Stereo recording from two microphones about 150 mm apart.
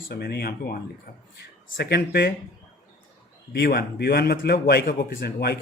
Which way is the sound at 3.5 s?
90° left.